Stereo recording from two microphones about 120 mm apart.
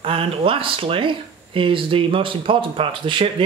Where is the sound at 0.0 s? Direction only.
50° right (ahead or behind).